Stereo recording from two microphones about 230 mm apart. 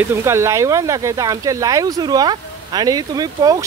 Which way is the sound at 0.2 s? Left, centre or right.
Centre.